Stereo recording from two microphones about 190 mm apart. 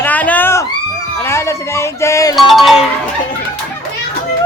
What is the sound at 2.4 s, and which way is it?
Speech, centre (ahead or behind).